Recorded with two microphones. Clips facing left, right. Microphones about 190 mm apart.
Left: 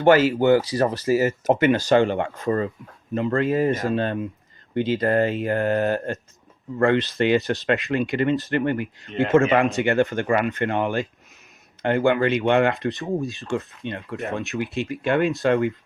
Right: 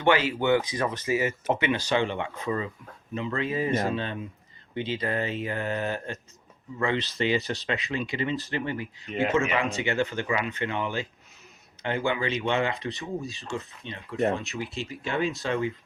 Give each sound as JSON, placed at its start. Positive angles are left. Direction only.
{"t": 0.0, "sound": "speech", "side_deg": 40}
{"t": 13.2, "sound": "speech", "side_deg": 0}
{"t": 13.5, "sound": "speech", "side_deg": 55}